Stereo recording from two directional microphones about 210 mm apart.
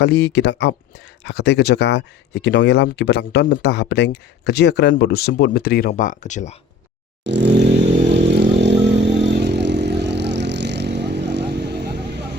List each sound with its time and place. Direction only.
0.0 s speech: 50° left (ahead or behind); by 6.6 s 35° left (ahead or behind)
7.3 s vehicle: 55° right (ahead or behind)